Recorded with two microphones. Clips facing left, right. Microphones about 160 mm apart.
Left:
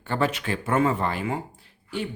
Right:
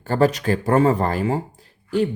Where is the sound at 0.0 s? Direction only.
40° right (ahead or behind).